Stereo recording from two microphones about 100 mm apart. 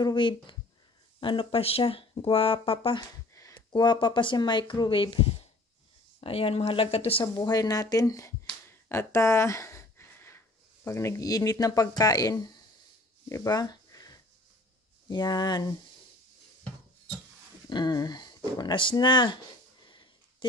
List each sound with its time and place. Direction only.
0.0 s speech: 55° left (ahead or behind)
3.4 s a sound: 35° left (ahead or behind)
3.7 s speech: 50° left (ahead or behind); by 7.2 s 75° left (ahead or behind)
7.3 s speech: 40° left (ahead or behind)
13.3 s a sound: 35° left (ahead or behind)
15.0 s speech: 45° left (ahead or behind)
17.6 s speech: 45° left (ahead or behind)